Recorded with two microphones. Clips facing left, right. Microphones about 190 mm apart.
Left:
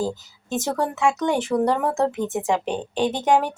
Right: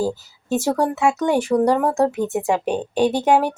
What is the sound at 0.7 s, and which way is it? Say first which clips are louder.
Speech: right 2 dB; 10° right (ahead or behind).